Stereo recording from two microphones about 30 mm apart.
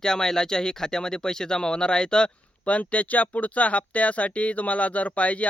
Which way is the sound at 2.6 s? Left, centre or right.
Left.